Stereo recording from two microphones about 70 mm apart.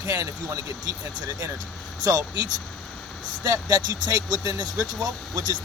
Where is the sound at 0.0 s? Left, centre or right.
Right.